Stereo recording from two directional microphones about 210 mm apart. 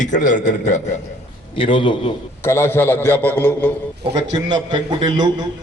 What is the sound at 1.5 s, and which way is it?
Speech, 25° left (ahead or behind).